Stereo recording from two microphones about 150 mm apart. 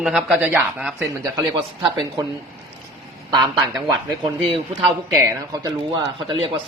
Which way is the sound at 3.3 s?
30° right (ahead or behind).